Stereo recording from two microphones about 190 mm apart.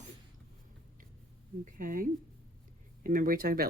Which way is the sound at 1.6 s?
45° right (ahead or behind).